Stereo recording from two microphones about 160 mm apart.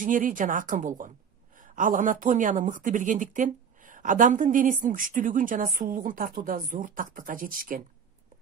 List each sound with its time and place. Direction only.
0.0 s speech: 55° right (ahead or behind)